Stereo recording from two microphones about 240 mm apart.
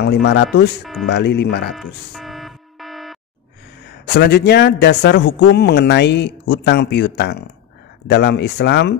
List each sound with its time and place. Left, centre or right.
0.0 s speech: left
1.7 s buzzer: centre
4.1 s speech: left